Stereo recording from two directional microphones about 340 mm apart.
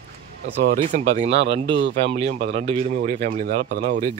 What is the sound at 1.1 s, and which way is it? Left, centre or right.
Speech, centre.